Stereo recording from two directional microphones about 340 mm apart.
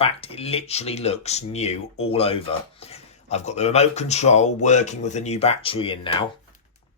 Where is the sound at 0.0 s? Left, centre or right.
Centre.